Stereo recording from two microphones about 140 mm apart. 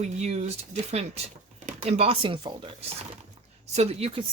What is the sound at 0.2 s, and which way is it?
Speech, 55° right (ahead or behind).